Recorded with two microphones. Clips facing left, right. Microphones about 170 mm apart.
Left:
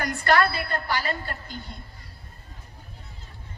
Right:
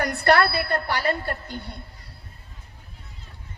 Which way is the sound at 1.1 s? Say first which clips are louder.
Right 5 dB; 60° right (ahead or behind).